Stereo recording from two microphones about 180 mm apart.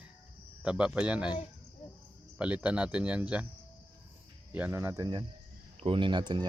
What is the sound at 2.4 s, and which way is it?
Speech, 5° right (ahead or behind).